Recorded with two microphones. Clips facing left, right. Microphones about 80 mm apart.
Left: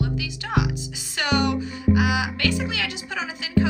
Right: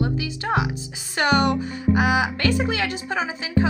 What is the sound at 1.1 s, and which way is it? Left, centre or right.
Speech, right.